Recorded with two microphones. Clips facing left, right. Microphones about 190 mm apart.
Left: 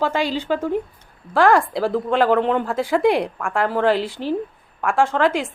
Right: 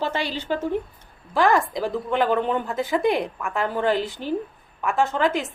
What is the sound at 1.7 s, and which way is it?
Speech, 90° left.